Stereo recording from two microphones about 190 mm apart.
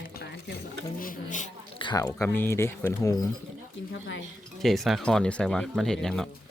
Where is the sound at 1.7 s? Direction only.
25° left (ahead or behind).